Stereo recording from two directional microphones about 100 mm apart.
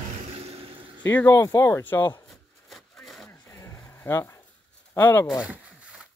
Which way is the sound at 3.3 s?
25° left (ahead or behind).